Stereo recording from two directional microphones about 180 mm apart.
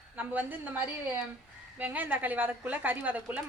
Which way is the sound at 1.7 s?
10° right (ahead or behind).